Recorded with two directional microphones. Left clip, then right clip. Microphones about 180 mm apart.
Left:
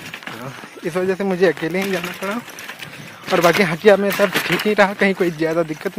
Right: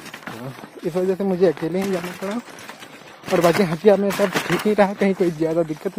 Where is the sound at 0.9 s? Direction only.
5° left (ahead or behind).